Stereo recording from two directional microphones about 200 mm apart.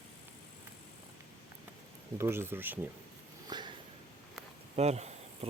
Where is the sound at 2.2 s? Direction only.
10° right (ahead or behind).